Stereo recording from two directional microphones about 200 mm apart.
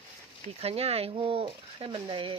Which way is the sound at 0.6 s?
30° right (ahead or behind).